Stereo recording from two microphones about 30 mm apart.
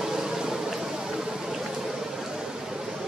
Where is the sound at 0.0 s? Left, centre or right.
Centre.